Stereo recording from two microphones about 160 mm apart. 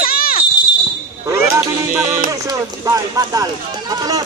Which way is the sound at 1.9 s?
20° right (ahead or behind).